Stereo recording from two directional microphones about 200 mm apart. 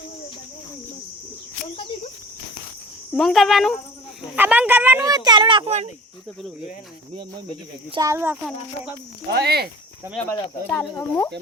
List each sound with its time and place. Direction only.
3.1 s speech: centre (ahead or behind); by 5.9 s 30° right (ahead or behind)
7.9 s speech: 15° right (ahead or behind)
9.3 s speech: 55° right (ahead or behind)
10.2 s speech: 10° left (ahead or behind)